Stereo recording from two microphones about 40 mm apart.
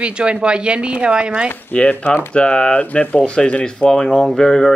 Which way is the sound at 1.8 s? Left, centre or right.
Left.